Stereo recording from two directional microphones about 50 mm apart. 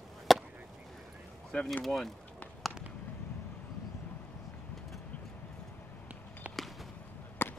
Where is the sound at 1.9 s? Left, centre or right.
Centre.